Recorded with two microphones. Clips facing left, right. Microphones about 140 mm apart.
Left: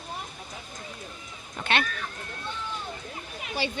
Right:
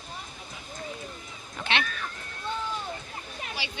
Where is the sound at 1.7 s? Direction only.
50° left (ahead or behind).